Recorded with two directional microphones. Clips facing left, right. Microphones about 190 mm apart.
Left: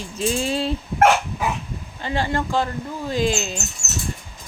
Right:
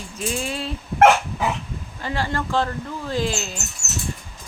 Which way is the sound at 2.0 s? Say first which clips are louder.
Left 2 dB; 20° left (ahead or behind).